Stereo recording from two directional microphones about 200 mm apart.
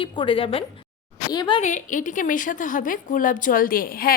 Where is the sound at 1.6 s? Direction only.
40° left (ahead or behind).